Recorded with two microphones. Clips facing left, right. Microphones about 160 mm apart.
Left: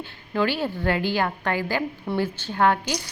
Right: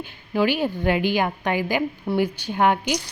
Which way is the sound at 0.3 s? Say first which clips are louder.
Right 3 dB; 15° right (ahead or behind).